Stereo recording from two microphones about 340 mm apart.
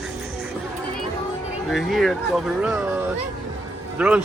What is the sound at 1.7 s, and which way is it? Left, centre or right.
Speech, centre.